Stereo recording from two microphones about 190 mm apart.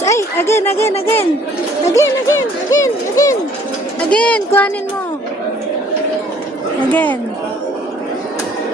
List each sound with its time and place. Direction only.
0.0 s a sound: 15° left (ahead or behind)
1.9 s speech: 15° left (ahead or behind)
4.1 s speech: 5° left (ahead or behind)
6.9 s speech: 10° left (ahead or behind)